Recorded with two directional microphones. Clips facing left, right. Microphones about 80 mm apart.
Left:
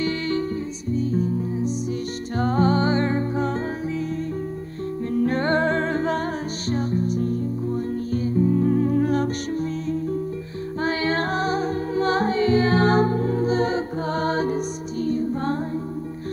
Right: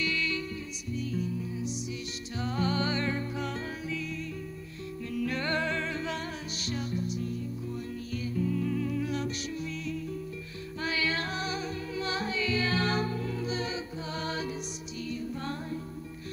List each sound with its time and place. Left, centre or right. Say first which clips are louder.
0.0 s music: left 9 dB; left
5.1 s music: left 10 dB; left